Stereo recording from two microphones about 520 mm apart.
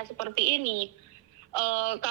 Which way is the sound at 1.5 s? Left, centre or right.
Right.